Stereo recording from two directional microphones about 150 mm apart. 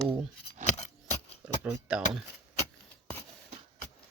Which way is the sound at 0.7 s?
50° left (ahead or behind).